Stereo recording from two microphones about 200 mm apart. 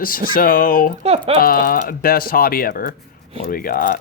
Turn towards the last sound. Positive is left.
turn(degrees=45)  # may be behind; listen again after turning